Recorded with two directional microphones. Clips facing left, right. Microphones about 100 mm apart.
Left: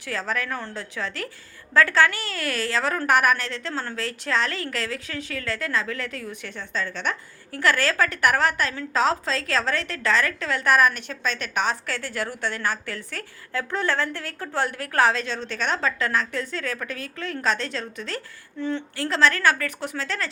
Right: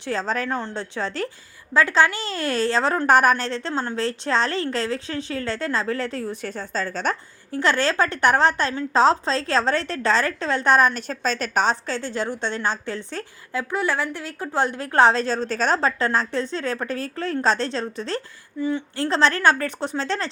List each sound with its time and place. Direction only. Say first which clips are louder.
0.0 s a woman's voice: right 4 dB; 30° right (ahead or behind)
1.7 s a woman's voice: right 1 dB; 20° right (ahead or behind); by 7.2 s 40° right (ahead or behind)
7.5 s a woman's voice: right 2 dB; 25° right (ahead or behind)
13.5 s a woman's voice: right 1 dB; 15° right (ahead or behind); by 18.2 s 30° right (ahead or behind)
18.6 s a woman's voice: right 3 dB; 10° right (ahead or behind)
18.9 s a woman's voice: right 1 dB; 30° right (ahead or behind)